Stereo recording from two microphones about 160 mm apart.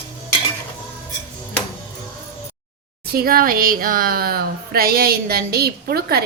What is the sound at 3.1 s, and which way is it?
Speech, 70° right (ahead or behind).